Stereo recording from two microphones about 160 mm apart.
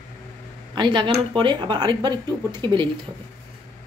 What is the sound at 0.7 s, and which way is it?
Speech, 30° right (ahead or behind).